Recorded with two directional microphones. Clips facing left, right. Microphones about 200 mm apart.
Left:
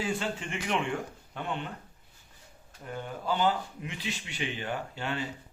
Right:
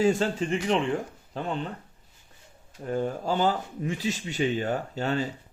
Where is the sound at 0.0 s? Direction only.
40° right (ahead or behind).